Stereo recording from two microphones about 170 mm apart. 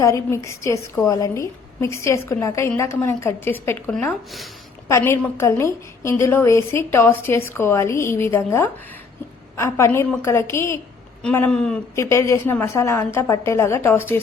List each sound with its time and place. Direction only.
0.0 s a woman's voice: 15° left (ahead or behind)
11.9 s a woman's voice: 15° left (ahead or behind)